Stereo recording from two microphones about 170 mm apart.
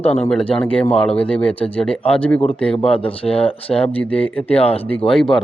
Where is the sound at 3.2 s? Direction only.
35° left (ahead or behind).